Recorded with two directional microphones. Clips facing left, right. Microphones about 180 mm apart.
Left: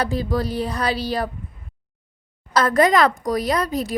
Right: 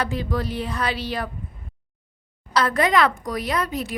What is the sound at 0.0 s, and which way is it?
A woman's voice, 35° left (ahead or behind).